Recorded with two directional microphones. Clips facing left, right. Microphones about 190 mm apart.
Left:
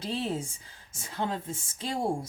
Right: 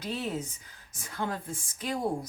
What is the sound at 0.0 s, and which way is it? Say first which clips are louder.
A woman's voice: left 2 dB; 30° left (ahead or behind).